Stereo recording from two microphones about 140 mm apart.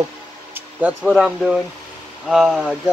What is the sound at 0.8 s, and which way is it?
Speech, 5° right (ahead or behind).